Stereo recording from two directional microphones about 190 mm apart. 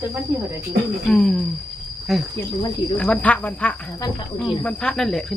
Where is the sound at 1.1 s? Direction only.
5° left (ahead or behind).